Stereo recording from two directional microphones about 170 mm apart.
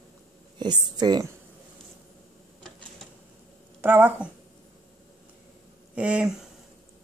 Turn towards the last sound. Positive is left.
turn(degrees=-5)  # may be behind; listen again after turning